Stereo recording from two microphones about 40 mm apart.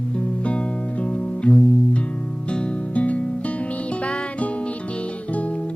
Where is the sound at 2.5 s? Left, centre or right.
Left.